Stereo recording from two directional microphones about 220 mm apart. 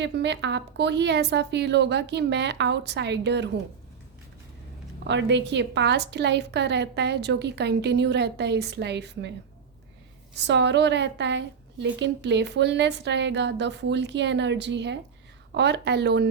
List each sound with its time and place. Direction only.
0.0 s a woman's voice: 50° right (ahead or behind)
5.0 s a woman's voice: 55° right (ahead or behind)
10.3 s a woman's voice: 50° right (ahead or behind)